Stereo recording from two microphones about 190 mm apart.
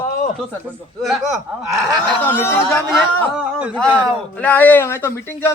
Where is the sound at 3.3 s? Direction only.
5° right (ahead or behind).